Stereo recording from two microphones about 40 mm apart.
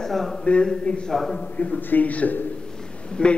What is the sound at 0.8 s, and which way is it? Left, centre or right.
Speech, left.